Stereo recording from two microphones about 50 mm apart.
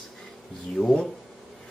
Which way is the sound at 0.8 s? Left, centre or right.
Centre.